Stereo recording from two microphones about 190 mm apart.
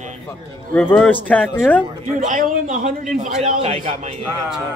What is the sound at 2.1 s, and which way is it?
A man's voice, 40° right (ahead or behind).